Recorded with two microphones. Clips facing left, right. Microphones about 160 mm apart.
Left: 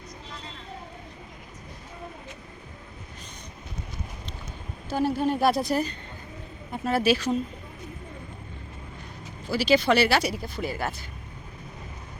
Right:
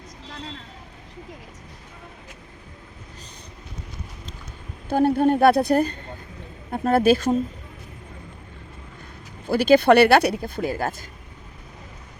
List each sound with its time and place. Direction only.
4.9 s speech: 55° right (ahead or behind)
9.5 s speech: 55° right (ahead or behind)